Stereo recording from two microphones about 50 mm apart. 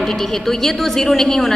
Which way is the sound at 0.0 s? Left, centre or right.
Centre.